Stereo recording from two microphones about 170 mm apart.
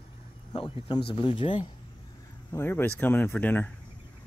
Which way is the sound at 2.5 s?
15° left (ahead or behind).